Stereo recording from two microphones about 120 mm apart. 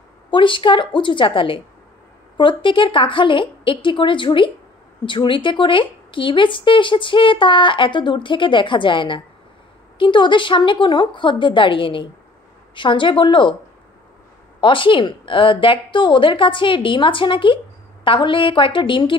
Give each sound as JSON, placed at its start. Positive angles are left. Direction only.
{"t": 0.3, "sound": "speech", "side_deg": 45}
{"t": 14.6, "sound": "speech", "side_deg": 45}